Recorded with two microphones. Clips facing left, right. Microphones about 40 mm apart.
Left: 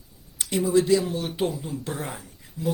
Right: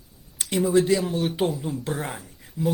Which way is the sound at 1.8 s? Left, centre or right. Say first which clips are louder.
Right 3 dB; right.